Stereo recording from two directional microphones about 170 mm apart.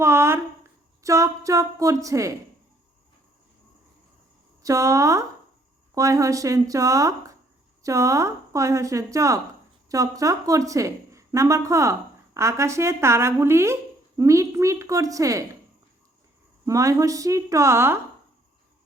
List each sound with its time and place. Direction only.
0.0 s speech: 15° right (ahead or behind)
4.6 s a woman's voice: 20° right (ahead or behind)
16.6 s speech: 20° right (ahead or behind)